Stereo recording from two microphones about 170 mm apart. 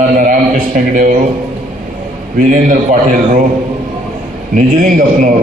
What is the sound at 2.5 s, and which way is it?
Speech, 50° right (ahead or behind).